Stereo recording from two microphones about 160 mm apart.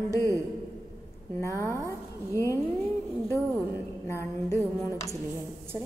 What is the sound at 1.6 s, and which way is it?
Speech, 20° right (ahead or behind).